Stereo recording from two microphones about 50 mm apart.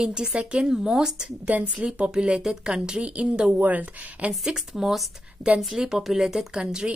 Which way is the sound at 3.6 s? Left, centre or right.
Right.